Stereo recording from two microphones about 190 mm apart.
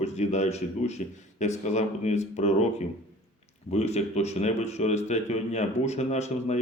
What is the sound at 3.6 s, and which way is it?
A man's voice, 35° left (ahead or behind).